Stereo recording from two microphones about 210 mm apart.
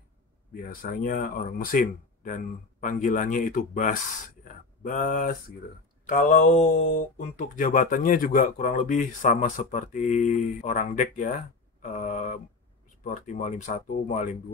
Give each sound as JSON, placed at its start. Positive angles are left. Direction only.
{"t": 0.5, "sound": "speech", "side_deg": 45}